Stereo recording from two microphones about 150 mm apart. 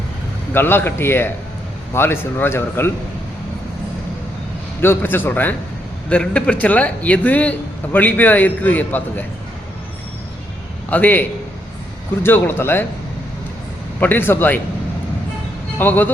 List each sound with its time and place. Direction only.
0.5 s a man's voice: 15° left (ahead or behind)
4.8 s a man's voice: 15° left (ahead or behind)
10.8 s a man's voice: 10° left (ahead or behind)
14.0 s a man's voice: 15° left (ahead or behind)
15.8 s a man's voice: 15° left (ahead or behind)